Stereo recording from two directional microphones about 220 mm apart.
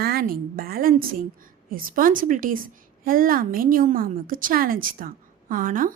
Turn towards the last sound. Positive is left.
turn(degrees=-40)  # may be behind; listen again after turning